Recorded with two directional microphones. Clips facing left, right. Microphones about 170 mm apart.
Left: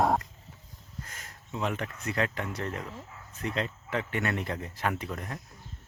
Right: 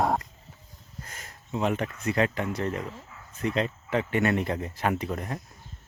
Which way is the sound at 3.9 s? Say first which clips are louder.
Right 7 dB; 20° right (ahead or behind).